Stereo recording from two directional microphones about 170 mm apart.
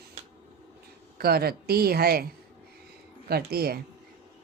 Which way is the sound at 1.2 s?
65° right (ahead or behind).